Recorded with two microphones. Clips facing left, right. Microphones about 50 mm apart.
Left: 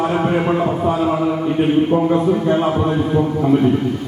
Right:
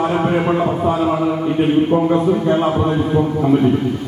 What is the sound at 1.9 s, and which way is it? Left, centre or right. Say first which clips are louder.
Speech: right 1 dB; right.